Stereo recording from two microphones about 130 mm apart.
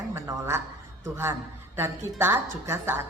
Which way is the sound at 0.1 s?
20° right (ahead or behind).